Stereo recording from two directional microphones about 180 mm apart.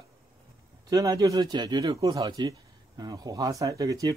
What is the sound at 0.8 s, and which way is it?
Speech, 20° right (ahead or behind).